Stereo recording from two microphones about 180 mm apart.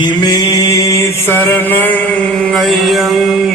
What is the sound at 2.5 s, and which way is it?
Mantra, centre (ahead or behind).